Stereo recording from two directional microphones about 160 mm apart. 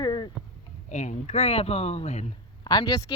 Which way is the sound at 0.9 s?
50° left (ahead or behind).